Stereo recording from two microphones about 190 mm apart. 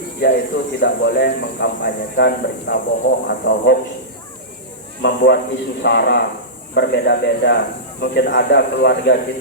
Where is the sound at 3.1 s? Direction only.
75° left (ahead or behind).